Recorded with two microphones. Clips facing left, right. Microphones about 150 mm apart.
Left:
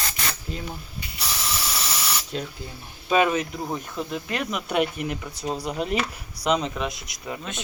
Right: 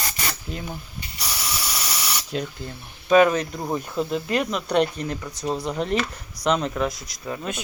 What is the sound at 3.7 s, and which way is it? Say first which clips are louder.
Insect: right 5 dB; 10° right (ahead or behind).